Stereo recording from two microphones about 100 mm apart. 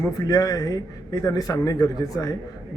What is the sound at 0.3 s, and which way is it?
A man's voice, 40° left (ahead or behind).